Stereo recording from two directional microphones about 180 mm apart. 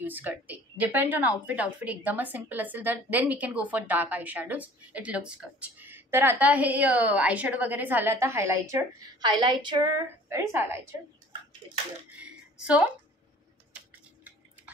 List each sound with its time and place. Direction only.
0.0 s a woman's voice: 10° right (ahead or behind)
9.2 s a woman's voice: 25° right (ahead or behind)
12.3 s a sound: 5° right (ahead or behind)